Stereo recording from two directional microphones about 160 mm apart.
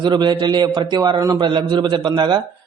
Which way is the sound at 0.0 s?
25° right (ahead or behind).